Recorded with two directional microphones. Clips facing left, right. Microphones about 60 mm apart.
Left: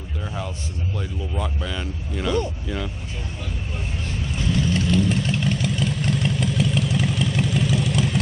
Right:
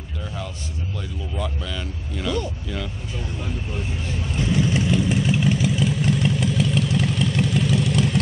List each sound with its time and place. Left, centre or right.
0.2 s a sound: left
1.4 s speech: left
4.5 s vehicle: centre